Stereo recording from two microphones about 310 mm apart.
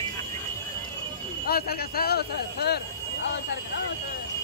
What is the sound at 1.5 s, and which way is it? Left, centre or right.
Speech, left.